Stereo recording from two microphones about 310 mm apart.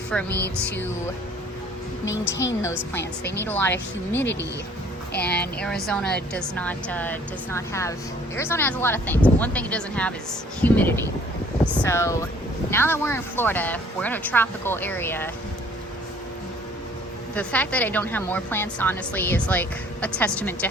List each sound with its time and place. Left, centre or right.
0.1 s a woman's voice: centre
2.3 s a woman's voice: left
3.3 s speech: centre
5.2 s a woman's voice: centre
17.3 s a woman's voice: centre